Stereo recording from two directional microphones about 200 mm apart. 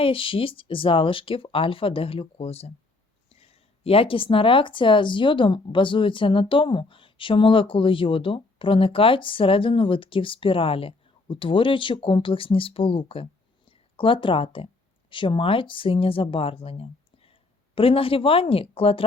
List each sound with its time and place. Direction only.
0.0 s a woman's voice: 25° left (ahead or behind)